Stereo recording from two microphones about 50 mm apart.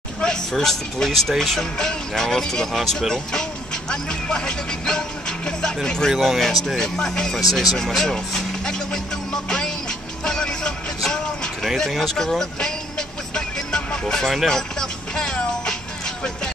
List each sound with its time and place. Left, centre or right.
0.2 s a sound: centre
1.0 s speech: centre
6.0 s speech: centre
6.8 s speech: centre
7.3 s speech: centre
10.2 s music: centre
11.9 s speech: centre
13.3 s music: centre